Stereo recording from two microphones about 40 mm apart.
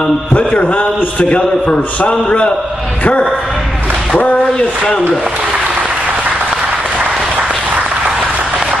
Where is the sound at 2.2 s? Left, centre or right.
Left.